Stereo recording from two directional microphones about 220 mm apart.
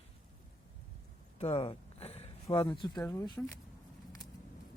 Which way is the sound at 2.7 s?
20° left (ahead or behind).